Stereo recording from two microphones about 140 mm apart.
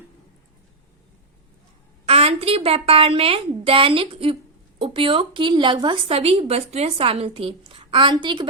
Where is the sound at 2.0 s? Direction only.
45° right (ahead or behind).